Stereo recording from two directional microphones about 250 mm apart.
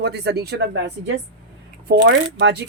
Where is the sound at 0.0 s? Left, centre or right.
Right.